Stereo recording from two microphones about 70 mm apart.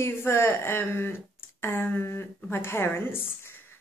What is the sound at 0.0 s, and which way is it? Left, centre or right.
Speech, left.